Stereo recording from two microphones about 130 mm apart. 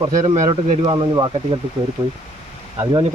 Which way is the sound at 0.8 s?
40° right (ahead or behind).